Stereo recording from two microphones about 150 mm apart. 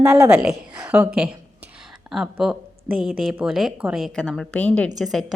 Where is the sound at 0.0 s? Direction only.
20° right (ahead or behind).